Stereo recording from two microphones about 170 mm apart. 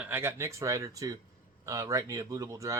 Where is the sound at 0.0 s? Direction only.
15° right (ahead or behind).